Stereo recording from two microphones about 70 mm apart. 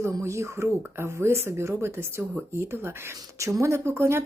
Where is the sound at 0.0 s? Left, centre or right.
Right.